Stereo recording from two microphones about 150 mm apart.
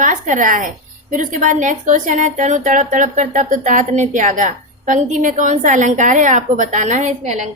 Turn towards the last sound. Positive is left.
turn(degrees=-50)  # may be behind; listen again after turning